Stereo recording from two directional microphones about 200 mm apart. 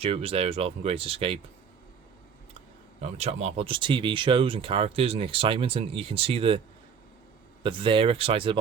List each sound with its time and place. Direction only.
0.0 s speech: 30° right (ahead or behind)
3.0 s speech: 30° right (ahead or behind)
7.6 s speech: 25° right (ahead or behind)